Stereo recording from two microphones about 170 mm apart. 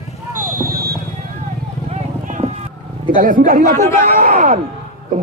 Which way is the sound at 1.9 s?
45° right (ahead or behind).